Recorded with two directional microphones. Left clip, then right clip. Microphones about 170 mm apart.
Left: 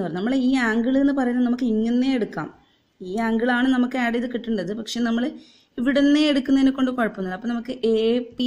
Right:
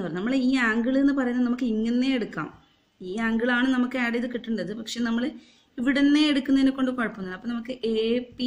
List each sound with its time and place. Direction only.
0.0 s a woman's voice: 40° left (ahead or behind)